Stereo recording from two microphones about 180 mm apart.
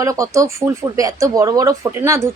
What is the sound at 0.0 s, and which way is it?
Speech, 20° right (ahead or behind).